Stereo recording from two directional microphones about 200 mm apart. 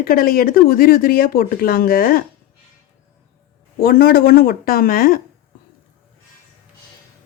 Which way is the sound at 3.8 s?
50° left (ahead or behind).